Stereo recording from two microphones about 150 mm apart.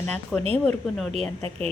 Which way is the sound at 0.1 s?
5° left (ahead or behind).